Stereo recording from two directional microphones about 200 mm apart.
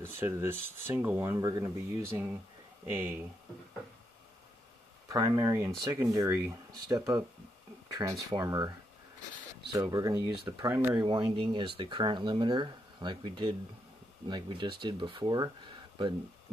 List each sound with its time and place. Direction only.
0.0 s speech: 10° right (ahead or behind)
5.0 s speech: 15° right (ahead or behind)
9.8 s speech: 15° right (ahead or behind)
11.1 s speech: 25° right (ahead or behind)